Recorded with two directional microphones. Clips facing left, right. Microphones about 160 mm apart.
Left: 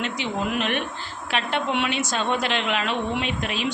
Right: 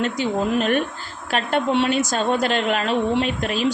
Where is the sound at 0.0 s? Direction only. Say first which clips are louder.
Right 5 dB; 35° right (ahead or behind).